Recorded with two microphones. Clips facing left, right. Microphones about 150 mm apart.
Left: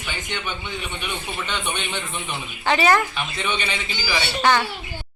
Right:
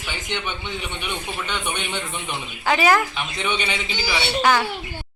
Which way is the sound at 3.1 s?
15° right (ahead or behind).